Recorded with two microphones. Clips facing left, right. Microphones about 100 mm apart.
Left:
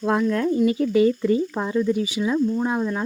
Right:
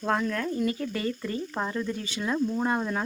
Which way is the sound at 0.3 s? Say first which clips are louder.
Left 8 dB; 20° left (ahead or behind).